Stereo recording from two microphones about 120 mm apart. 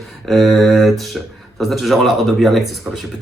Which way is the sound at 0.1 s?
Centre (ahead or behind).